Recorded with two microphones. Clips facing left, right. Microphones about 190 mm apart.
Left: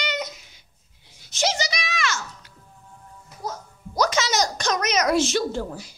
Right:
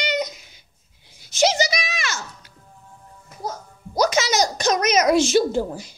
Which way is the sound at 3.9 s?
15° right (ahead or behind).